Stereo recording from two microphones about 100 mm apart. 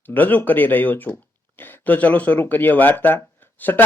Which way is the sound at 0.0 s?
20° left (ahead or behind).